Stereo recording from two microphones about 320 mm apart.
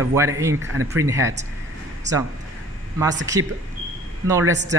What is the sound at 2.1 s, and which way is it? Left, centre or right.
Speech, right.